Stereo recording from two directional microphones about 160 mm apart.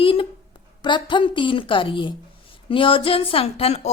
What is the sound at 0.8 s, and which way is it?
A woman's voice, 30° left (ahead or behind).